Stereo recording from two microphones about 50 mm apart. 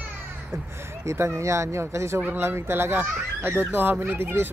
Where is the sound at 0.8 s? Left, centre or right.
Right.